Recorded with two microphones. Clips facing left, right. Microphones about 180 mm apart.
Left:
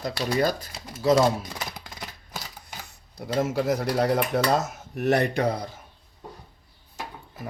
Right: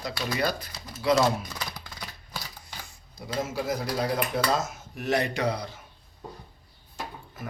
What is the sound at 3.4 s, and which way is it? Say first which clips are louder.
Speech: left 5 dB; 70° left (ahead or behind).